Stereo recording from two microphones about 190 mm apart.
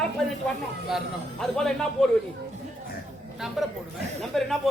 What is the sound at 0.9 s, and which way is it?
A man's voice, centre (ahead or behind).